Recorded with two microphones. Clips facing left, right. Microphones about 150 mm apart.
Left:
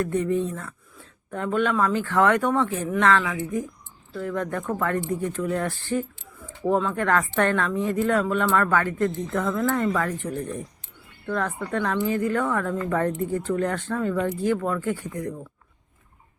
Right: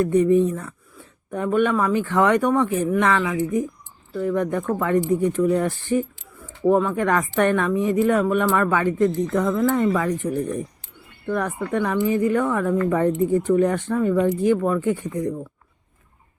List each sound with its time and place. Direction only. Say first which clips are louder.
0.0 s speech: right 7 dB; 15° right (ahead or behind)